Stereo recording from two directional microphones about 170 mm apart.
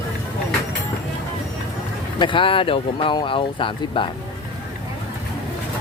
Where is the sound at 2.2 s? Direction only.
30° left (ahead or behind).